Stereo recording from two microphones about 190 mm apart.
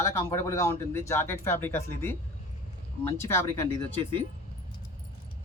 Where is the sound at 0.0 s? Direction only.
15° left (ahead or behind).